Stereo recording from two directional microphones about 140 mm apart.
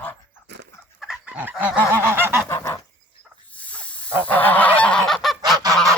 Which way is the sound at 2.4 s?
20° left (ahead or behind).